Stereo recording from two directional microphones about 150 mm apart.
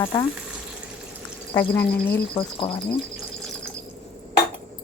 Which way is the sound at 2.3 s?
35° left (ahead or behind).